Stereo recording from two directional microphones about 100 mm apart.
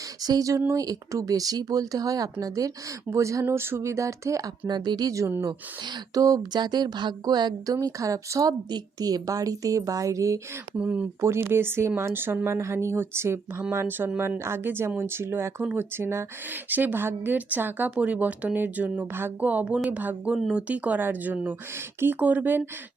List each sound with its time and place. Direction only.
0.2 s speech: 40° right (ahead or behind)
4.7 s speech: 45° right (ahead or behind)
10.8 s a woman's voice: 15° right (ahead or behind)